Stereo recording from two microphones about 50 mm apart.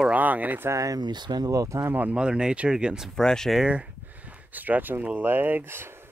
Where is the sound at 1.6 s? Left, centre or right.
Right.